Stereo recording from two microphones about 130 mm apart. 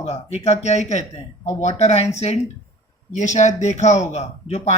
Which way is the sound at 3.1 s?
70° left (ahead or behind).